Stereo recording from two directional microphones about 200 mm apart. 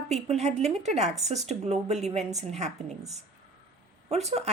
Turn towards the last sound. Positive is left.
turn(degrees=-35)  # may be behind; listen again after turning